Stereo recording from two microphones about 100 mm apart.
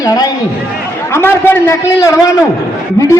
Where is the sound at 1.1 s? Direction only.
25° left (ahead or behind).